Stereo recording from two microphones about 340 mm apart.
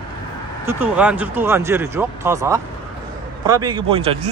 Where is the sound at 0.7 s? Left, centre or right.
Centre.